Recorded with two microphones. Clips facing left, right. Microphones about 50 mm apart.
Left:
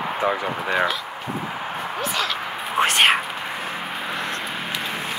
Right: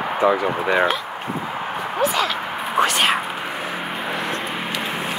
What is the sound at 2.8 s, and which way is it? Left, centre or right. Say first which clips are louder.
Speech: left 2 dB; left.